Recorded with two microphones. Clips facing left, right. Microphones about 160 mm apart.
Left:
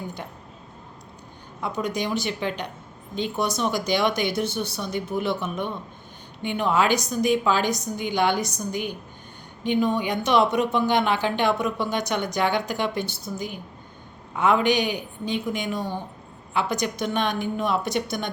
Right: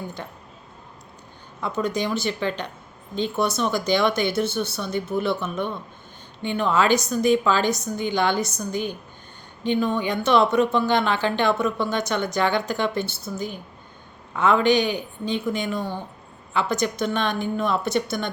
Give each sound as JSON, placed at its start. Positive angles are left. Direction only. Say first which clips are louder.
{"t": 0.2, "sound": "speech", "louder": "right 1 dB", "side_deg": 10}
{"t": 1.6, "sound": "speech", "louder": "right 2 dB", "side_deg": 15}